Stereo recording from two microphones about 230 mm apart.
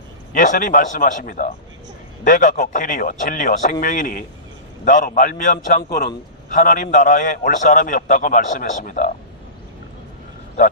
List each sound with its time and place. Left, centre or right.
0.3 s a man's voice: left